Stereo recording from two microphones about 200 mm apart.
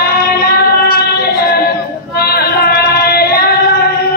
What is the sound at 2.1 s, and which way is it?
Singing, 50° left (ahead or behind).